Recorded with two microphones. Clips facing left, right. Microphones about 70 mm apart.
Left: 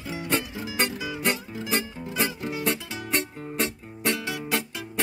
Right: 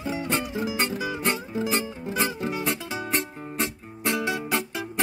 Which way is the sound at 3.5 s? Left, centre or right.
Right.